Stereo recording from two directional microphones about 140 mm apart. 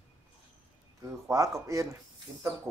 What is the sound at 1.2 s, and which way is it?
Speech, 20° right (ahead or behind).